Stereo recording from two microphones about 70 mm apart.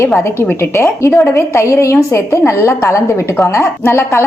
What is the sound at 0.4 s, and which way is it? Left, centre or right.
A woman's voice, left.